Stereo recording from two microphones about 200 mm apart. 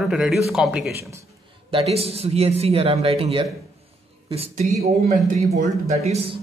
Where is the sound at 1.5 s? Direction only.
30° right (ahead or behind).